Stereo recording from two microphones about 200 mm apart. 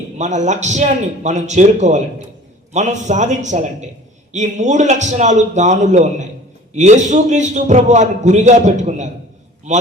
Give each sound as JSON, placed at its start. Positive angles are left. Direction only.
{"t": 0.2, "sound": "a man's voice", "side_deg": -35}